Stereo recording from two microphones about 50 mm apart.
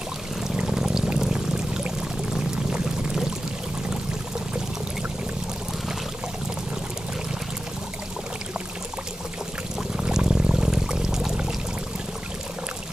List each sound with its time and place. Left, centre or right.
0.7 s pour: centre
9.9 s pour: centre